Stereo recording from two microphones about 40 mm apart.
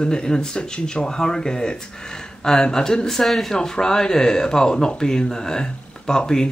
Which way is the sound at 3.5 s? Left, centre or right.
Centre.